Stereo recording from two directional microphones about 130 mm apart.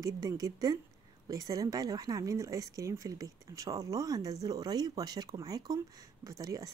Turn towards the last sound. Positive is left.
turn(degrees=-25)  # may be behind; listen again after turning